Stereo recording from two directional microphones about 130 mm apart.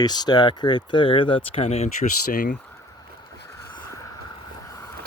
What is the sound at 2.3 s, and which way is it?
Speech, 90° left.